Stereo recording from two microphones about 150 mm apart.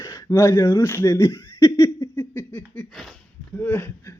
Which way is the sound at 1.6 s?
20° left (ahead or behind).